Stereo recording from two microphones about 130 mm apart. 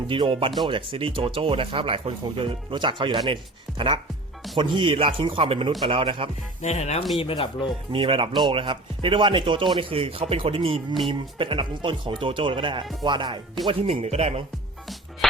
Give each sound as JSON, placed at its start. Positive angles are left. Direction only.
{"t": 0.1, "sound": "speech", "side_deg": -45}
{"t": 6.6, "sound": "speech", "side_deg": 60}
{"t": 7.2, "sound": "speech", "side_deg": 45}
{"t": 7.9, "sound": "speech", "side_deg": -45}
{"t": 13.7, "sound": "speech", "side_deg": -45}